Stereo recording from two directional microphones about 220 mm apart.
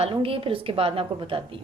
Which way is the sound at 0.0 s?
25° right (ahead or behind).